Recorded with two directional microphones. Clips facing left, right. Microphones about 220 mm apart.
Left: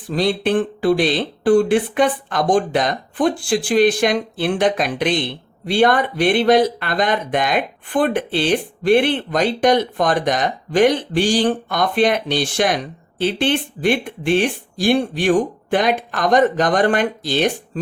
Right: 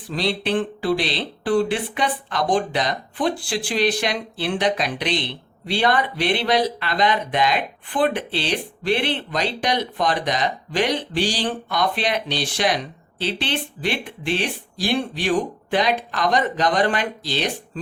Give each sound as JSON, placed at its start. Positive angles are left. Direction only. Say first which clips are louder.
{"t": 0.1, "sound": "speech", "louder": "left 5 dB", "side_deg": 50}